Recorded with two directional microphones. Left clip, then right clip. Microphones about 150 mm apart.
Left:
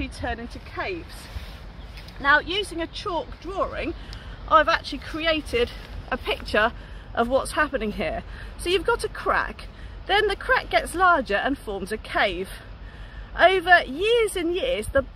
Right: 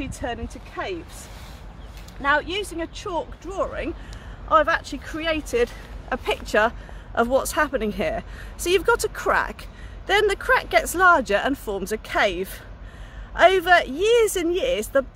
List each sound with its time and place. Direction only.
0.0 s speech: 15° right (ahead or behind)
2.2 s speech: 20° right (ahead or behind)
7.2 s speech: 40° right (ahead or behind)